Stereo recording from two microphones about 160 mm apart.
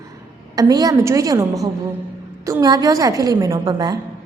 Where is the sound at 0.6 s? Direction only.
25° right (ahead or behind).